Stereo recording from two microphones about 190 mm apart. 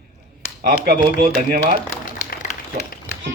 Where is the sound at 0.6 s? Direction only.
55° right (ahead or behind).